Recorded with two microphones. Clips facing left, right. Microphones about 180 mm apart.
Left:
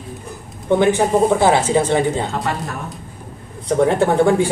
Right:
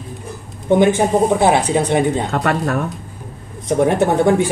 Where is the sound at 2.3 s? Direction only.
65° right (ahead or behind).